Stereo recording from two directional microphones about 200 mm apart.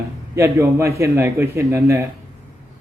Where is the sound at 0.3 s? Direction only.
15° right (ahead or behind).